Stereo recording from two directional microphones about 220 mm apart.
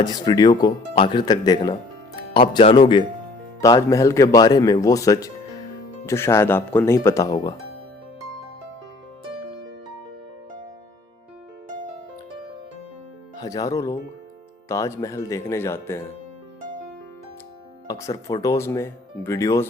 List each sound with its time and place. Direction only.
0.0 s speech: 20° left (ahead or behind)
13.3 s speech: 15° left (ahead or behind)
17.8 s speech: 15° left (ahead or behind)